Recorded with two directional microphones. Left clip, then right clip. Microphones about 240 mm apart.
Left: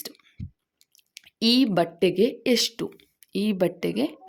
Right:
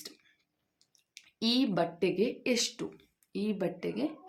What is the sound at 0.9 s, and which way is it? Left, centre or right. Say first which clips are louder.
Speech: left 8 dB; left.